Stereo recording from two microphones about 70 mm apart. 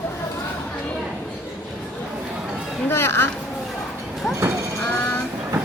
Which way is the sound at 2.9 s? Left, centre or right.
Left.